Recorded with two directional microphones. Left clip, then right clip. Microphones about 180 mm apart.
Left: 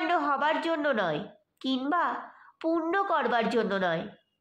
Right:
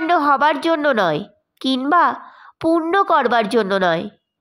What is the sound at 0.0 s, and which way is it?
A woman's voice, 45° right (ahead or behind).